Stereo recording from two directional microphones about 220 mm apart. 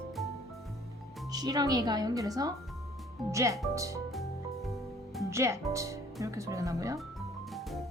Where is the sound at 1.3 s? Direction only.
15° right (ahead or behind).